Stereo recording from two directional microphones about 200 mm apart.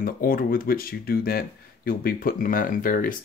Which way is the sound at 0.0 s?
45° left (ahead or behind).